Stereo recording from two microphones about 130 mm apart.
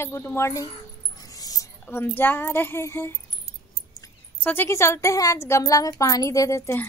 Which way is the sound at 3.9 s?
25° left (ahead or behind).